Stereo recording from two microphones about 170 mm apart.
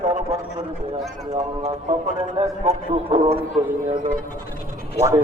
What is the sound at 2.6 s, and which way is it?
Speech, 35° right (ahead or behind).